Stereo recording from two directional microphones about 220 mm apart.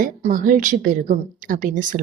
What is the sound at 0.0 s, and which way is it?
A woman's voice, 35° right (ahead or behind).